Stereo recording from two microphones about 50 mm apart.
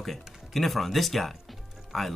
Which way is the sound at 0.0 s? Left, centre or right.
Centre.